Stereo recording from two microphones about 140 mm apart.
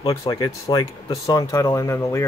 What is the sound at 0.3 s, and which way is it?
Speech, 35° left (ahead or behind).